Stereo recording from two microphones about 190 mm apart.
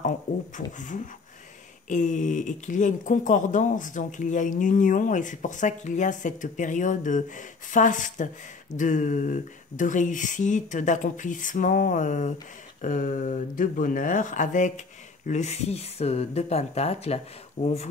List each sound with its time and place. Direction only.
0.6 s speech: 40° left (ahead or behind)
1.9 s speech: 40° left (ahead or behind)